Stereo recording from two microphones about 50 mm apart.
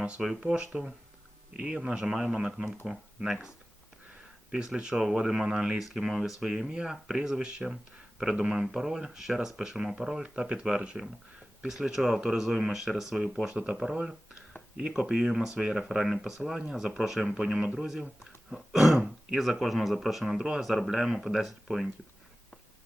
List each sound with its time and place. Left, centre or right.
0.0 s speech: centre
0.7 s speech: centre
4.5 s speech: centre
10.2 s speech: centre